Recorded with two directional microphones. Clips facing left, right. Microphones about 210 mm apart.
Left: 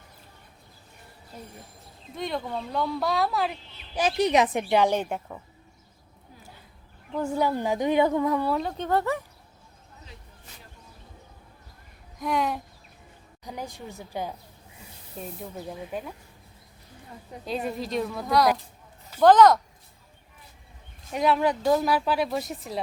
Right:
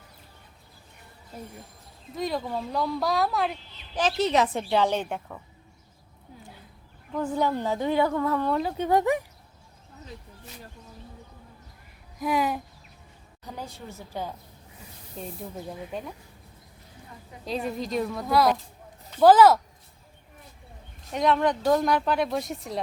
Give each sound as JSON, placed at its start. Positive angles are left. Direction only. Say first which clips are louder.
{"t": 2.1, "sound": "speech", "louder": "right 2 dB", "side_deg": 0}
{"t": 4.0, "sound": "a woman's voice", "louder": "left 1 dB", "side_deg": 15}
{"t": 7.2, "sound": "a woman's voice", "louder": "even", "side_deg": 10}
{"t": 8.5, "sound": "speech", "louder": "right 2 dB", "side_deg": -5}
{"t": 8.9, "sound": "speech", "louder": "right 3 dB", "side_deg": -15}
{"t": 12.2, "sound": "speech", "louder": "right 1 dB", "side_deg": -5}
{"t": 13.4, "sound": "a woman's voice", "louder": "left 2 dB", "side_deg": 15}
{"t": 17.4, "sound": "speech", "louder": "even", "side_deg": 0}
{"t": 21.1, "sound": "a woman's voice", "louder": "even", "side_deg": 5}